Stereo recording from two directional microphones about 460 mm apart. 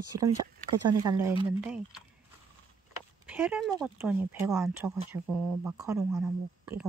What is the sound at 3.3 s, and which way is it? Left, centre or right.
Speech, centre.